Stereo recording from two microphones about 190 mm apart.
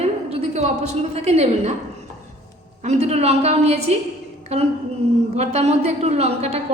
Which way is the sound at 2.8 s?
35° right (ahead or behind).